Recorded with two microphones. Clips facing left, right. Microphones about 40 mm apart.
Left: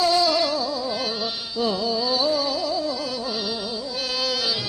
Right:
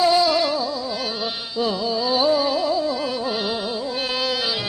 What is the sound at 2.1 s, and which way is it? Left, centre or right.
Music, right.